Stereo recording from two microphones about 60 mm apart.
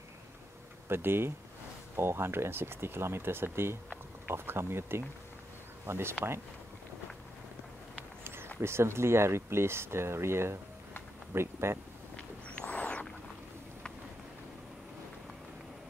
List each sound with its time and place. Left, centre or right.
0.8 s speech: right
8.5 s speech: right
12.4 s a sound: left